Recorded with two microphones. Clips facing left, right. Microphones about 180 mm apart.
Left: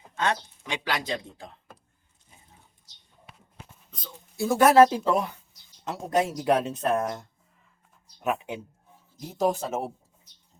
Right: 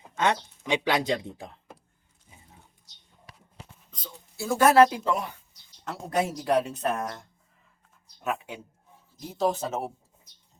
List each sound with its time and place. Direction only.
0.2 s speech: 20° right (ahead or behind)
3.9 s a sound: 15° left (ahead or behind)
4.7 s speech: 20° left (ahead or behind)
8.2 s speech: 20° left (ahead or behind)